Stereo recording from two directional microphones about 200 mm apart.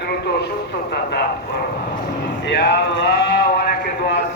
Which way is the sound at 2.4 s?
55° left (ahead or behind).